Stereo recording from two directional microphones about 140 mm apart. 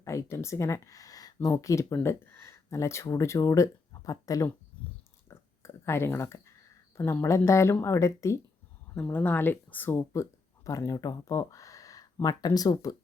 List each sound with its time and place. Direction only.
0.0 s speech: 20° left (ahead or behind)
5.3 s a sound: 20° left (ahead or behind)
6.9 s speech: 20° left (ahead or behind)